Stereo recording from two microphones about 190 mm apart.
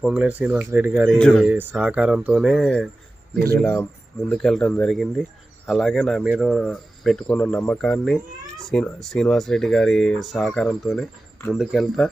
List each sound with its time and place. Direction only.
0.0 s speech: 5° right (ahead or behind)
1.2 s speech: 5° left (ahead or behind)
1.5 s speech: 10° right (ahead or behind)
3.3 s speech: 55° right (ahead or behind)
3.6 s speech: 10° left (ahead or behind)